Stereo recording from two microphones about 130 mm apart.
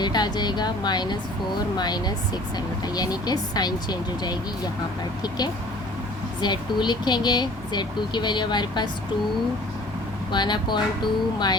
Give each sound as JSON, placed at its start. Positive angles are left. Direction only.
{"t": 0.0, "sound": "speech", "side_deg": 35}
{"t": 6.4, "sound": "speech", "side_deg": 35}
{"t": 10.3, "sound": "speech", "side_deg": 35}